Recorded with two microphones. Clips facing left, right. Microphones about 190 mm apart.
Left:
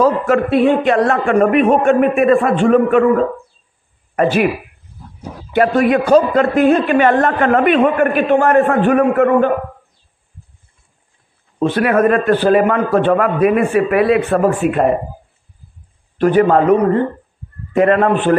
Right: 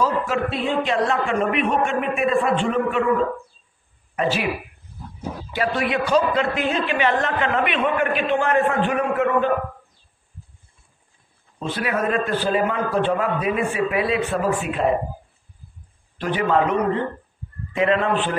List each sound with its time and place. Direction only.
0.0 s a man's voice: 60° left (ahead or behind)
4.1 s speech: 55° left (ahead or behind)
5.5 s a man's voice: 50° left (ahead or behind)
11.6 s a man's voice: 60° left (ahead or behind)
16.2 s a man's voice: 45° left (ahead or behind)